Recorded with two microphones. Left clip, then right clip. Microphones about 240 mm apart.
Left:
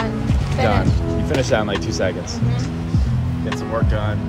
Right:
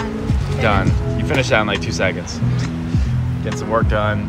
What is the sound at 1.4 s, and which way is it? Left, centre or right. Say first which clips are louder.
Speech: right 4 dB; centre.